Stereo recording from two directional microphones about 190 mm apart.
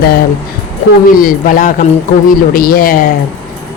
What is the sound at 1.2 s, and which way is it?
Speech, 45° left (ahead or behind).